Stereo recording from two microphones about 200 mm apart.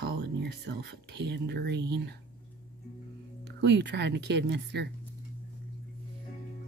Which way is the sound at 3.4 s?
60° right (ahead or behind).